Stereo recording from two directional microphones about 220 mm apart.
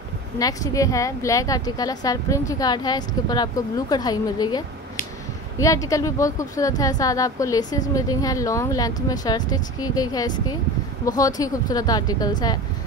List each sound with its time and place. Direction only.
0.4 s speech: 15° left (ahead or behind)